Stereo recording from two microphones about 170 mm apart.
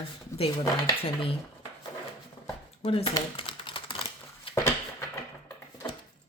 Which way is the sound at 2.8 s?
35° left (ahead or behind).